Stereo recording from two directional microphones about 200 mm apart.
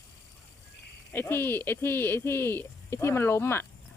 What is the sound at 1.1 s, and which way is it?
Speech, 10° left (ahead or behind).